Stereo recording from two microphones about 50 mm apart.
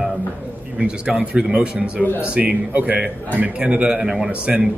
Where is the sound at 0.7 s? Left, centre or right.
Centre.